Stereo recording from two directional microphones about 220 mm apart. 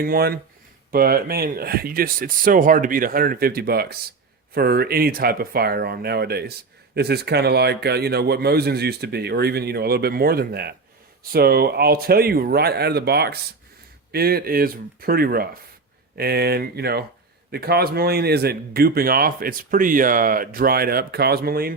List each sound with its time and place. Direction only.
0.0 s speech: 45° right (ahead or behind)